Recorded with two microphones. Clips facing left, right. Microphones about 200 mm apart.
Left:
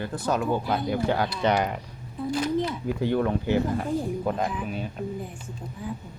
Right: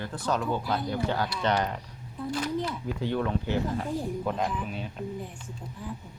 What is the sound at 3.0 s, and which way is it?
Speech, 10° left (ahead or behind).